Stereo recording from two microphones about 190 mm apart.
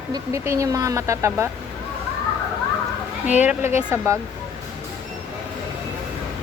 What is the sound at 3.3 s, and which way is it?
Speech, 10° right (ahead or behind).